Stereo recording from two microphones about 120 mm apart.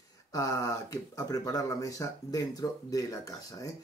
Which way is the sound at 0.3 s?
30° left (ahead or behind).